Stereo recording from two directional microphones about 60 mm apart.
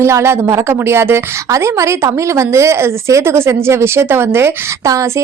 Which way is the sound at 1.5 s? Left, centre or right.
Right.